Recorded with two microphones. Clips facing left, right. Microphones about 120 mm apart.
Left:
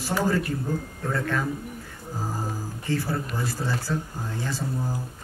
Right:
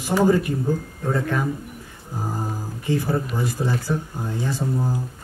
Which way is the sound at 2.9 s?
15° right (ahead or behind).